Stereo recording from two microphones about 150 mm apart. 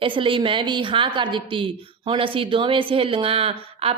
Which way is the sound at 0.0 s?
35° right (ahead or behind).